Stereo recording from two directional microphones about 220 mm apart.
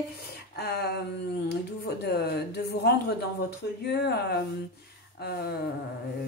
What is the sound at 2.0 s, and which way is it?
A woman's voice, 45° left (ahead or behind).